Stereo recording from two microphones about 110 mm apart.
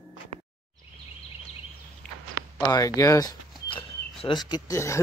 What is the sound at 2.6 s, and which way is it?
Speech, 30° left (ahead or behind).